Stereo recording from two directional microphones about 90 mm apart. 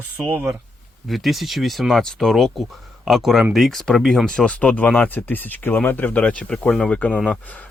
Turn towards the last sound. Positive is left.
turn(degrees=15)  # may be behind; listen again after turning